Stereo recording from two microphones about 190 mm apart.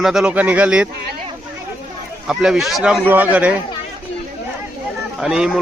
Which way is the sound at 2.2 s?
5° right (ahead or behind).